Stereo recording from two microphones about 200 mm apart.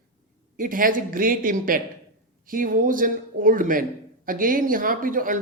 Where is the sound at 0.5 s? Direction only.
45° right (ahead or behind).